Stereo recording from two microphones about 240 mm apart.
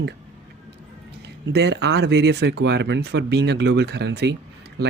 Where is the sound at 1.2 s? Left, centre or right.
Right.